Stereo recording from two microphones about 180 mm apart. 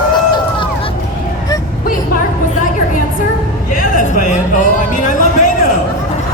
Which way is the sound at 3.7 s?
50° left (ahead or behind).